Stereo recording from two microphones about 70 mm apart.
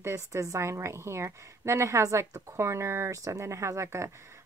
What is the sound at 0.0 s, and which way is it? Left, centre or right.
A woman's voice, right.